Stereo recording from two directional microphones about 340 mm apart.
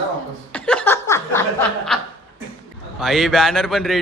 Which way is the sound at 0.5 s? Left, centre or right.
Centre.